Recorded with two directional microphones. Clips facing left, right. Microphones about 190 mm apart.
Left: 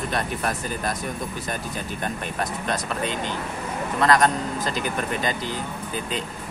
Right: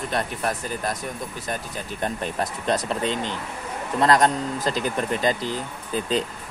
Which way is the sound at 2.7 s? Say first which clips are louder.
Right 6 dB; 30° right (ahead or behind).